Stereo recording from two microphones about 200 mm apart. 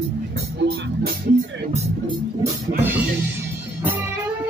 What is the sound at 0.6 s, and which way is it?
Music, 60° right (ahead or behind).